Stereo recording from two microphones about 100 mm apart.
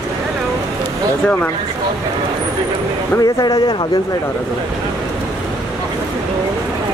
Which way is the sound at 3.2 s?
45° left (ahead or behind).